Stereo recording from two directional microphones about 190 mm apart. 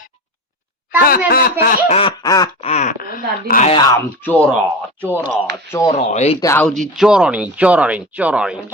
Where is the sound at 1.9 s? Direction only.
25° left (ahead or behind).